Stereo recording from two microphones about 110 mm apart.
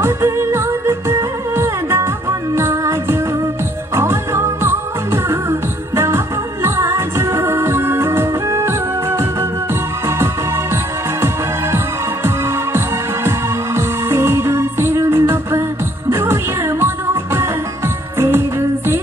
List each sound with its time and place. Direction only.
0.0 s music: 25° right (ahead or behind)